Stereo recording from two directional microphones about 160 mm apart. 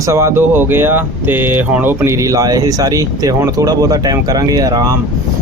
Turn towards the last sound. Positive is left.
turn(degrees=-25)  # may be behind; listen again after turning